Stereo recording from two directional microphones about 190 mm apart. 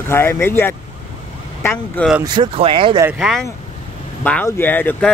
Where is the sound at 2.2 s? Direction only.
25° right (ahead or behind).